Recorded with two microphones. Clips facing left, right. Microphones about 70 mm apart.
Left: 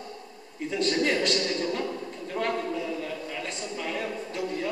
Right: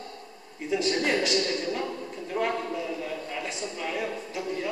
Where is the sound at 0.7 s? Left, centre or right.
Centre.